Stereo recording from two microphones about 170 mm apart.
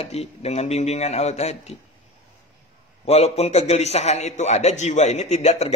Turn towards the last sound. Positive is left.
turn(degrees=40)  # may be behind; listen again after turning